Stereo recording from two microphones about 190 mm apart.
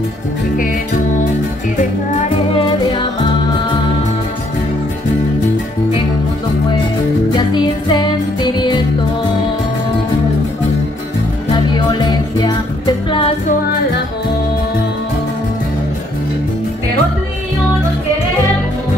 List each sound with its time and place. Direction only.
1.8 s music: 40° left (ahead or behind)
2.5 s music: 25° left (ahead or behind)
7.3 s music: 25° left (ahead or behind)
11.7 s music: 25° left (ahead or behind)